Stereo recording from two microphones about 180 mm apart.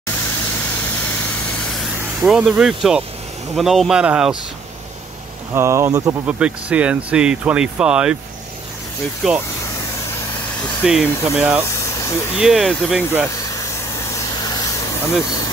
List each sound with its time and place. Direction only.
1.3 s spray: centre (ahead or behind)
2.0 s speech: 5° right (ahead or behind)
5.5 s speech: 15° right (ahead or behind)
6.2 s speech: 5° right (ahead or behind)
9.2 s speech: centre (ahead or behind)
10.8 s speech: 5° right (ahead or behind)
11.6 s vehicle: 15° left (ahead or behind)
12.4 s speech: 5° right (ahead or behind)
14.1 s vehicle: 20° left (ahead or behind)